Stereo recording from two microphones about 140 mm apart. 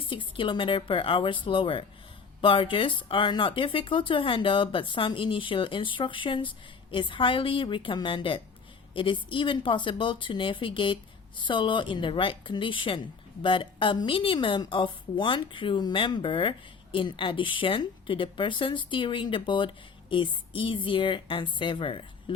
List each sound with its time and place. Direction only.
0.1 s a woman's voice: 35° left (ahead or behind)